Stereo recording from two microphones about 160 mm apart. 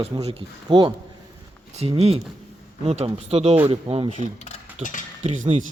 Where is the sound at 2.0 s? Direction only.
40° right (ahead or behind).